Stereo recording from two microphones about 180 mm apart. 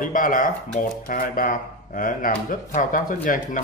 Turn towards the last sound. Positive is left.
turn(degrees=50)  # may be behind; listen again after turning